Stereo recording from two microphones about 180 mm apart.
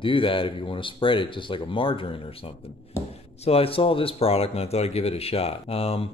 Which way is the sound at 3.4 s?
30° left (ahead or behind).